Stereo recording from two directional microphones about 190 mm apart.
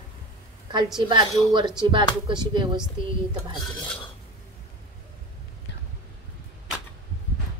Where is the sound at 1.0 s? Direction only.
25° right (ahead or behind).